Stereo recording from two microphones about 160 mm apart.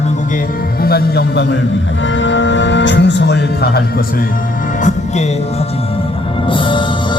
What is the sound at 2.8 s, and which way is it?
Speech, 90° left.